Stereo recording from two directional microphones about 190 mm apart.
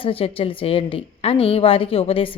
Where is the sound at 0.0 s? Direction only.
30° left (ahead or behind).